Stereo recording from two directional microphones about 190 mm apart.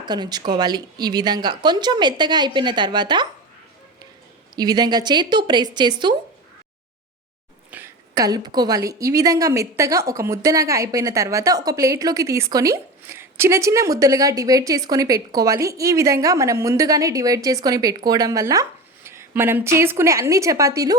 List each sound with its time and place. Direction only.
0.0 s speech: 20° right (ahead or behind)
4.5 s speech: 20° right (ahead or behind)
7.7 s a sound: 10° right (ahead or behind)
8.1 s a woman's voice: 20° right (ahead or behind)